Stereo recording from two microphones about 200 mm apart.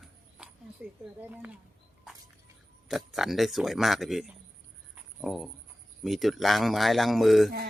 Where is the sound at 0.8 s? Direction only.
10° right (ahead or behind).